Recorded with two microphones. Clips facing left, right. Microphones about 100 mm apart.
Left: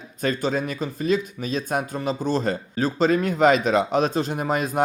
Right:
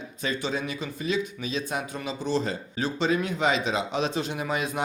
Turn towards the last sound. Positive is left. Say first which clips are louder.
# left 5 dB
turn(degrees=45)  # may be behind; listen again after turning